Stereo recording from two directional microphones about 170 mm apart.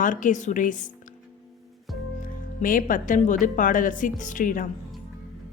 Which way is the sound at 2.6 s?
50° left (ahead or behind).